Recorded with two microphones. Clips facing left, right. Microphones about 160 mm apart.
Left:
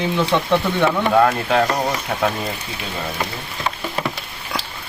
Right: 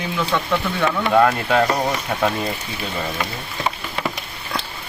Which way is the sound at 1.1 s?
Centre (ahead or behind).